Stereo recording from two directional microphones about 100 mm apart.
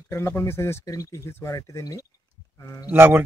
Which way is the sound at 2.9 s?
20° right (ahead or behind).